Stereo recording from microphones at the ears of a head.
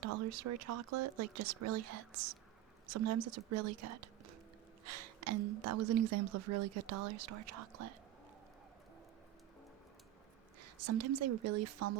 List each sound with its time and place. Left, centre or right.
0.0 s a woman's voice: right
10.6 s a woman's voice: right